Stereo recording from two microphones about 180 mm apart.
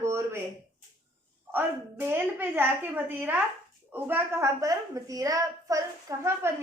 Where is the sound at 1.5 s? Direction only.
10° right (ahead or behind).